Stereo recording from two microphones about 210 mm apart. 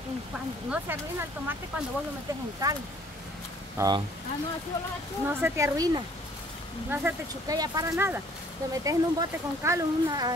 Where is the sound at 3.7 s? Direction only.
20° right (ahead or behind).